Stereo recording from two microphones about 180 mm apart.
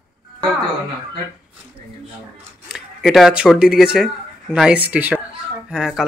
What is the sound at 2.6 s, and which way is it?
Speech, centre (ahead or behind).